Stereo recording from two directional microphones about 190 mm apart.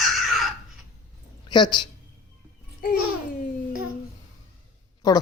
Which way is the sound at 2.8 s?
50° left (ahead or behind).